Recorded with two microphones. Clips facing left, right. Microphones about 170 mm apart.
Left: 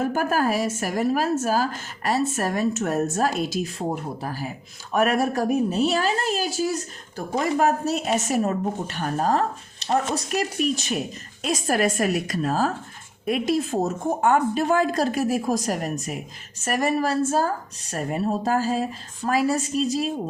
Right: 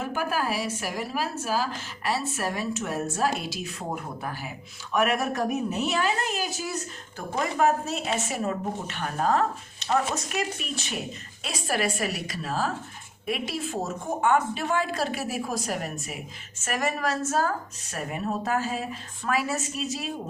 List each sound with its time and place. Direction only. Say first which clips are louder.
0.0 s a woman's voice: left 6 dB; 45° left (ahead or behind)